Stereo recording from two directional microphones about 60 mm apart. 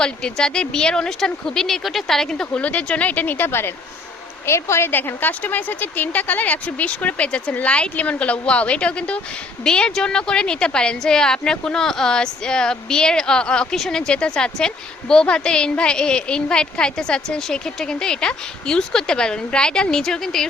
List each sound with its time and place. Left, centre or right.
0.0 s a woman's voice: centre
2.5 s speech: left
4.4 s a woman's voice: left
4.9 s a woman's voice: left; by 20.5 s centre